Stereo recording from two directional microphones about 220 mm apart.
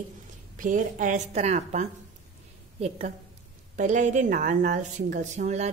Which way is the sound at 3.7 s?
35° right (ahead or behind).